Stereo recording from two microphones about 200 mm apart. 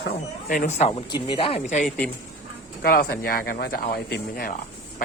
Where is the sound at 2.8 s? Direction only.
50° left (ahead or behind).